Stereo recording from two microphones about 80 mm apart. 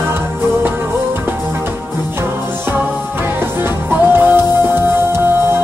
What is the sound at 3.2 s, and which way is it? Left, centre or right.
Music, right.